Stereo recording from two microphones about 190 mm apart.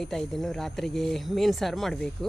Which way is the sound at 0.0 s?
Centre (ahead or behind).